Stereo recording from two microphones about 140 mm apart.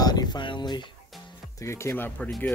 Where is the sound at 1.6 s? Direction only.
20° left (ahead or behind).